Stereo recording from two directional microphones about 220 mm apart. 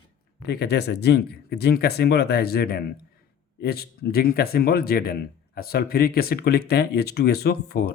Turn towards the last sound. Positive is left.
turn(degrees=45)  # may be behind; listen again after turning